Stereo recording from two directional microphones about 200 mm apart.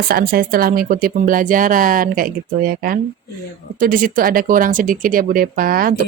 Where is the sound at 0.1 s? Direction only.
45° right (ahead or behind).